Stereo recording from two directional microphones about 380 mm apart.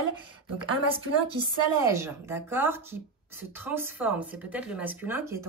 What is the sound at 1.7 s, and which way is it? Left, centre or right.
Speech, centre.